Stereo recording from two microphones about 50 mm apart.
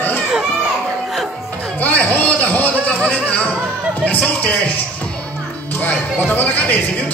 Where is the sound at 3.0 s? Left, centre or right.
Left.